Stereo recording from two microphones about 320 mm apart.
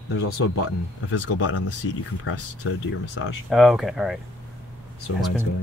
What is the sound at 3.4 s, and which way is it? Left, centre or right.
Speech, centre.